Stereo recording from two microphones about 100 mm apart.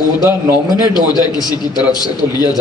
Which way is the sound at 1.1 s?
45° left (ahead or behind).